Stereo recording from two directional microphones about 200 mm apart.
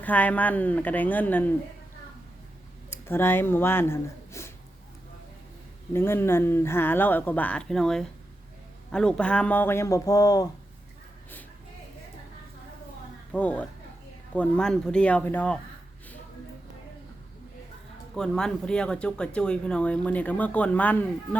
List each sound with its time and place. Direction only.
0.0 s speech: 10° left (ahead or behind)
2.9 s speech: 10° left (ahead or behind)
5.9 s speech: 10° left (ahead or behind)
13.3 s speech: 5° left (ahead or behind)
18.2 s speech: 5° left (ahead or behind)